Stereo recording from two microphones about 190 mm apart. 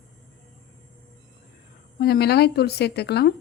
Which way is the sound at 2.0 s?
55° left (ahead or behind).